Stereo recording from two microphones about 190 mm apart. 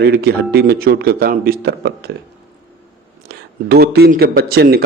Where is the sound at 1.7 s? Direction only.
60° right (ahead or behind).